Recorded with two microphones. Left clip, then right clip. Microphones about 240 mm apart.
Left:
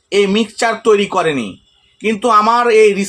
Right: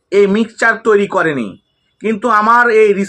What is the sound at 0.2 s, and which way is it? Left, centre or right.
Speech, centre.